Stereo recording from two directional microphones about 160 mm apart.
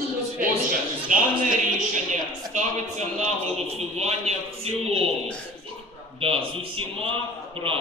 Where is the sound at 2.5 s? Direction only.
50° right (ahead or behind).